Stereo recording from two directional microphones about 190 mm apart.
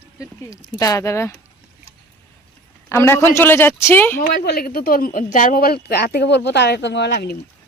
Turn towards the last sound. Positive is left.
turn(degrees=60)  # may be behind; listen again after turning